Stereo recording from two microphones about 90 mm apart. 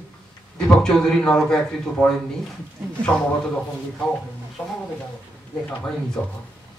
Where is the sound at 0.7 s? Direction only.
5° left (ahead or behind).